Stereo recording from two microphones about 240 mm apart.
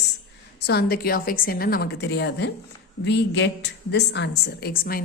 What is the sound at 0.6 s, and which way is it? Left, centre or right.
A woman's voice, left.